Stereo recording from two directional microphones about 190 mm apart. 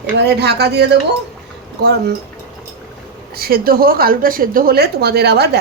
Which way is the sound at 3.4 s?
55° right (ahead or behind).